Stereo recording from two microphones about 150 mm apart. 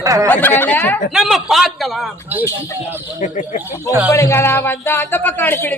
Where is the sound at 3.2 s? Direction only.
55° left (ahead or behind).